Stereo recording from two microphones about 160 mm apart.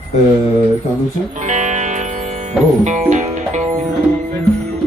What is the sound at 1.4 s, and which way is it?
Music, 50° right (ahead or behind).